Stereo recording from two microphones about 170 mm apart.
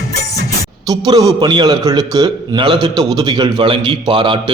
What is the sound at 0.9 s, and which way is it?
A man's voice, 25° right (ahead or behind).